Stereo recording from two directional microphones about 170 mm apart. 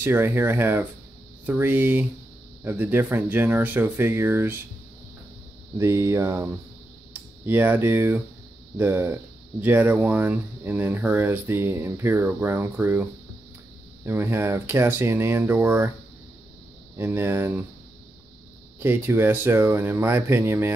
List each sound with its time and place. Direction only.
0.0 s speech: 15° right (ahead or behind)
5.8 s speech: 15° right (ahead or behind)
14.0 s speech: 15° right (ahead or behind)
16.9 s speech: 15° right (ahead or behind)
18.8 s speech: 15° right (ahead or behind)